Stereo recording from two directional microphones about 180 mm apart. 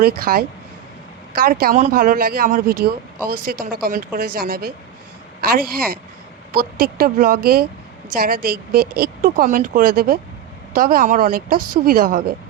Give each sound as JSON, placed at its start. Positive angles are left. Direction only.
{"t": 0.0, "sound": "a woman's voice", "side_deg": -55}